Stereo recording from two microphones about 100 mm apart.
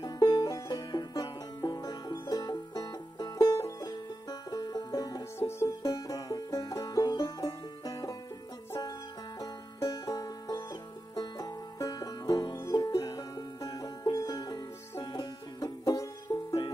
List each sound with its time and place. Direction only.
0.0 s music: 40° left (ahead or behind)
7.2 s banjo: 35° left (ahead or behind)
9.4 s music: 40° left (ahead or behind)